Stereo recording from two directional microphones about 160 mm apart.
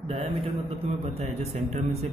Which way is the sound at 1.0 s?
40° right (ahead or behind).